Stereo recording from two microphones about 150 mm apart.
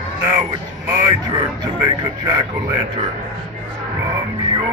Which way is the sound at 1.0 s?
25° right (ahead or behind).